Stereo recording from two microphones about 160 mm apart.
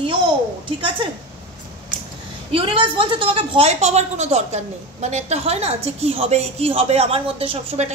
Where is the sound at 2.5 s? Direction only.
35° right (ahead or behind).